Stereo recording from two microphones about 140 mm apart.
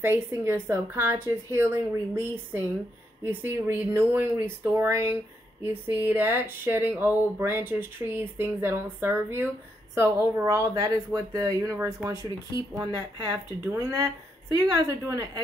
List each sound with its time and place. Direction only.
0.0 s speech: 15° right (ahead or behind)